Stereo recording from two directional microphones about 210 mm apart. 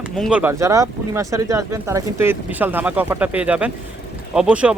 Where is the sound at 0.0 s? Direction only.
5° right (ahead or behind).